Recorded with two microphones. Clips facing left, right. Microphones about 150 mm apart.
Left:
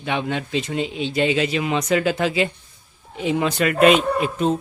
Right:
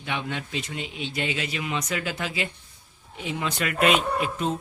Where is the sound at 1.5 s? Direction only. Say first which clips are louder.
Left 9 dB; 90° left.